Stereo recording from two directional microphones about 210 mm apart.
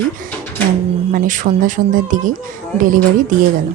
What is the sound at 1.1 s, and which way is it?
Speech, 40° right (ahead or behind).